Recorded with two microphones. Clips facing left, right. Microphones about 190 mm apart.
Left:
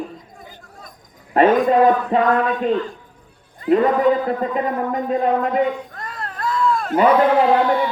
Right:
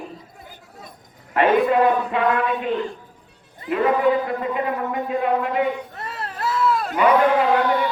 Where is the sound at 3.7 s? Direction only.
40° left (ahead or behind).